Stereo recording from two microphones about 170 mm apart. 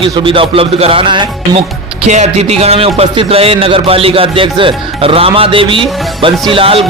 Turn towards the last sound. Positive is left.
turn(degrees=-30)  # may be behind; listen again after turning